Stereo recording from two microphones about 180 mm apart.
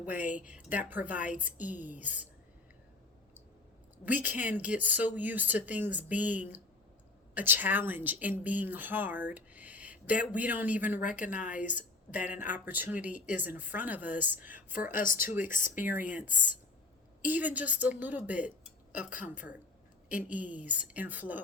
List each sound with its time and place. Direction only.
0.0 s speech: 10° right (ahead or behind)
3.9 s a woman's voice: 10° right (ahead or behind)
11.2 s speech: 45° left (ahead or behind)
11.5 s speech: 10° right (ahead or behind)
15.4 s speech: 45° left (ahead or behind)
17.2 s a woman's voice: 10° right (ahead or behind)
20.1 s speech: 10° right (ahead or behind)